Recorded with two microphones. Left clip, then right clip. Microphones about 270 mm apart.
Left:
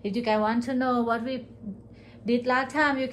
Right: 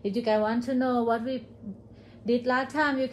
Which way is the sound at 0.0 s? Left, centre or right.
Centre.